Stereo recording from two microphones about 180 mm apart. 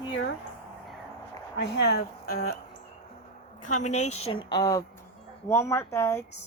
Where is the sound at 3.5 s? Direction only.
45° left (ahead or behind); by 6.2 s 15° left (ahead or behind).